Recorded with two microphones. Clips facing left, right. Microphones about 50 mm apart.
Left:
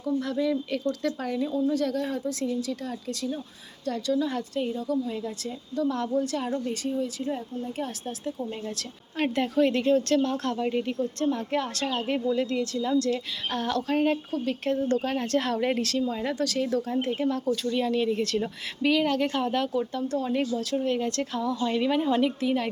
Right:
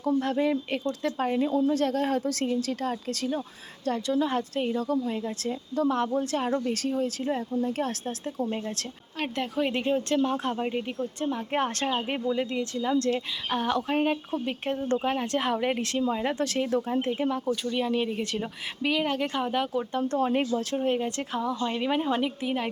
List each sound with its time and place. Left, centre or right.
0.0 s speech: right
1.4 s a woman's voice: right
3.8 s speech: right
8.2 s speech: right
9.1 s speech: centre
9.6 s speech: centre
10.7 s speech: centre
11.5 s speech: right
11.9 s speech: right
13.5 s speech: centre
15.8 s speech: right
20.0 s speech: right
20.7 s speech: right